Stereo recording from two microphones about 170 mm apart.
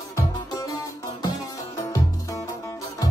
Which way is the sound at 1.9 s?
20° left (ahead or behind).